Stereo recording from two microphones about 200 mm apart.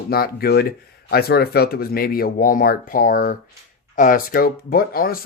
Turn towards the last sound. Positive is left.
turn(degrees=50)  # may be behind; listen again after turning